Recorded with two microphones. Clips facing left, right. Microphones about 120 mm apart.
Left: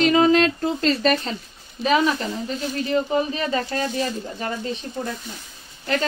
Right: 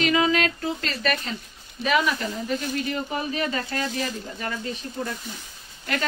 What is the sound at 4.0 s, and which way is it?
Speech, 35° left (ahead or behind).